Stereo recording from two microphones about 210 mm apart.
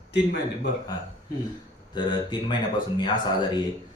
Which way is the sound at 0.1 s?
55° left (ahead or behind).